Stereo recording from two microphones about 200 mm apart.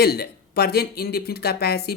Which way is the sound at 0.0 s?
55° left (ahead or behind).